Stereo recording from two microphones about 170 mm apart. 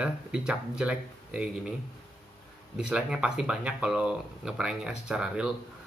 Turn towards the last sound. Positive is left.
turn(degrees=-5)  # may be behind; listen again after turning